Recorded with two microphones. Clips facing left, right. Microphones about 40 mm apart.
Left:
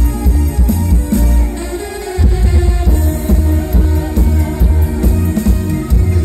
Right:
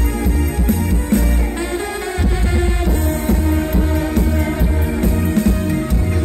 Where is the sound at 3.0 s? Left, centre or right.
Right.